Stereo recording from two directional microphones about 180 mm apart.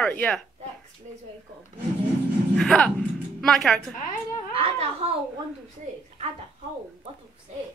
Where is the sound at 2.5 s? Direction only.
5° left (ahead or behind).